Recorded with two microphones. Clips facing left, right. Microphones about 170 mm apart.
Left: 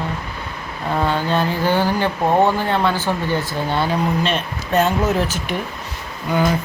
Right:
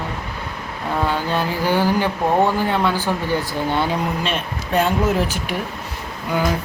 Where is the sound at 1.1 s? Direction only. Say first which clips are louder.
Left 2 dB; 10° right (ahead or behind).